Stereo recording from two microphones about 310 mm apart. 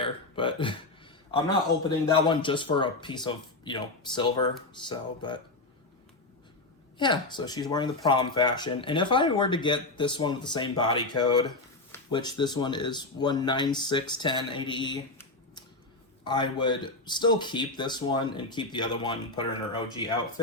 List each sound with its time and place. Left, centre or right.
0.0 s a man's voice: centre
7.0 s speech: centre